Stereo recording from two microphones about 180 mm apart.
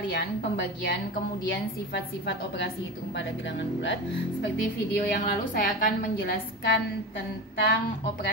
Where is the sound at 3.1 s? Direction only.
85° left.